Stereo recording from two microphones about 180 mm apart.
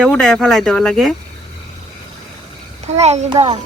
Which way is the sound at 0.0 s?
5° left (ahead or behind).